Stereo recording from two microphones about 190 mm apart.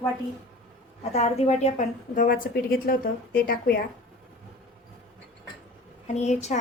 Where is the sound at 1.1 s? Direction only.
35° left (ahead or behind); by 3.7 s 50° left (ahead or behind).